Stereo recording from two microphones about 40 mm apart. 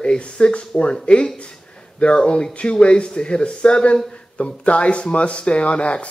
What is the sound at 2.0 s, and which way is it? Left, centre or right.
Speech, left.